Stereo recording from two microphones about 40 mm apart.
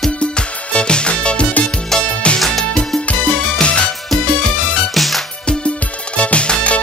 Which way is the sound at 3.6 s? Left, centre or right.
Left.